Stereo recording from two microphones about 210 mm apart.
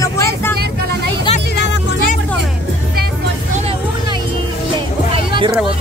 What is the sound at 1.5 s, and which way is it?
Music, 55° left (ahead or behind).